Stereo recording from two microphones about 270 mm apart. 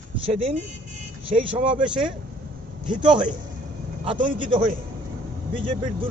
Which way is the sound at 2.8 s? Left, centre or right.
Centre.